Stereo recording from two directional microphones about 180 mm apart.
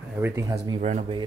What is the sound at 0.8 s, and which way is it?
Speech, 40° right (ahead or behind).